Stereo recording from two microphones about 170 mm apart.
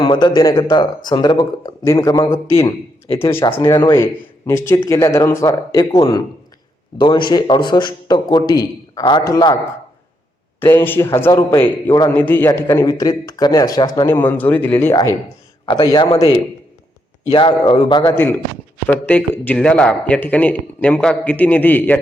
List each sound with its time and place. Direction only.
0.0 s speech: 25° left (ahead or behind)
10.6 s speech: 15° left (ahead or behind)
12.1 s speech: 10° left (ahead or behind)
15.6 s speech: 30° left (ahead or behind)
18.1 s speech: 10° left (ahead or behind)